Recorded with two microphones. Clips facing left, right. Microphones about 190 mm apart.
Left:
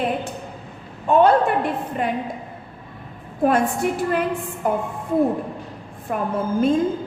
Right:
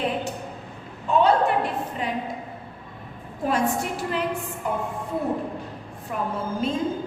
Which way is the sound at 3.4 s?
55° left (ahead or behind).